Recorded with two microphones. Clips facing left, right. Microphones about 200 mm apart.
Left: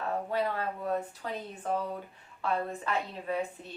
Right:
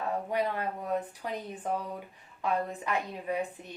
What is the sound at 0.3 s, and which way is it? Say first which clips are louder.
A woman's voice: right 1 dB; 15° right (ahead or behind).